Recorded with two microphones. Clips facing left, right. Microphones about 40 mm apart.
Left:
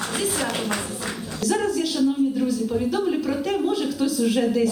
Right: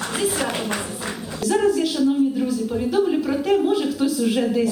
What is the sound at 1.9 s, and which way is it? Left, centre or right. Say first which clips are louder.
Speech: right 2 dB; centre.